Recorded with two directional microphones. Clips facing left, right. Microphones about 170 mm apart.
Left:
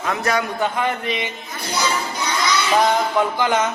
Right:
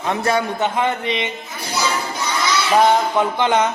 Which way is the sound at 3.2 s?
25° right (ahead or behind).